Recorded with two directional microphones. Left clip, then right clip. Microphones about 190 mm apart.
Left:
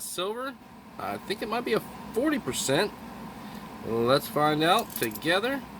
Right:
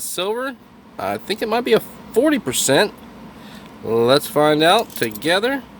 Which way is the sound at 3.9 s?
55° right (ahead or behind).